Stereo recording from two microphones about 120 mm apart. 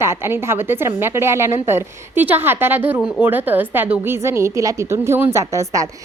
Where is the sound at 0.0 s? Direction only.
20° right (ahead or behind).